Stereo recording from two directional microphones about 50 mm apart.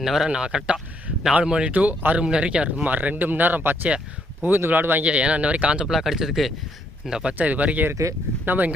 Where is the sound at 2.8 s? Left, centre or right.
Right.